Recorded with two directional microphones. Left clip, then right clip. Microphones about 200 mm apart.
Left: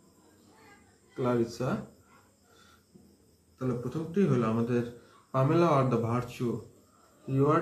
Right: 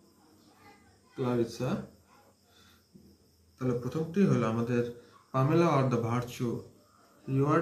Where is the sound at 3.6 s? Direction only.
35° right (ahead or behind).